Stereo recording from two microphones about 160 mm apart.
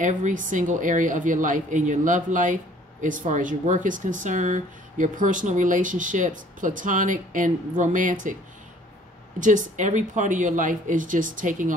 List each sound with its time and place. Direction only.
0.0 s a woman's voice: 50° right (ahead or behind)
9.4 s a woman's voice: 55° right (ahead or behind)